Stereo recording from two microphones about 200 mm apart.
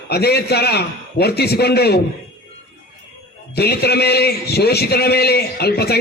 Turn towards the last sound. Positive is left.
turn(degrees=55)  # may be behind; listen again after turning